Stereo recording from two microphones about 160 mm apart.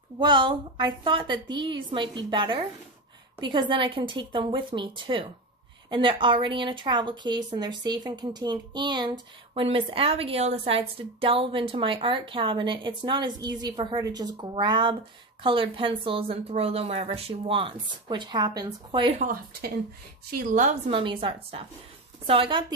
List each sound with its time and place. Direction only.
0.2 s a woman's voice: 30° right (ahead or behind)
19.1 s a woman's voice: 60° right (ahead or behind)
20.6 s a woman's voice: 45° right (ahead or behind)
21.0 s a woman's voice: 30° right (ahead or behind)